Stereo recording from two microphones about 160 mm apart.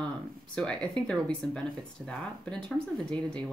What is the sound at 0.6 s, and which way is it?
Speech, 5° left (ahead or behind).